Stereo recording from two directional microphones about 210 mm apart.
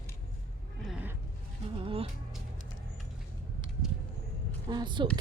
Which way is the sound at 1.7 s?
25° right (ahead or behind).